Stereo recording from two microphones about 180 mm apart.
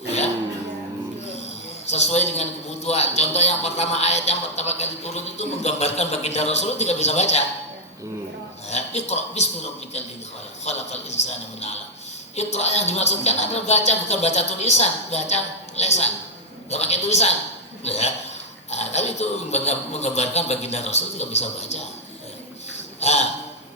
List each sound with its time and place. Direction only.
1.9 s a man's voice: 35° left (ahead or behind)
8.7 s speech: 40° left (ahead or behind)
10.7 s a man's voice: 40° left (ahead or behind)
23.0 s a man's voice: 40° left (ahead or behind)